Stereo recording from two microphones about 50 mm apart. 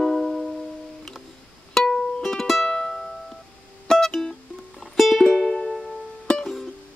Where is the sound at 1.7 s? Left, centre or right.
Centre.